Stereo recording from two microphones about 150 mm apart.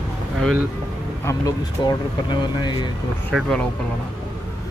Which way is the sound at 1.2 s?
25° left (ahead or behind).